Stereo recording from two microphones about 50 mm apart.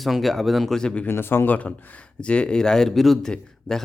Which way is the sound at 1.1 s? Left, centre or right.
Left.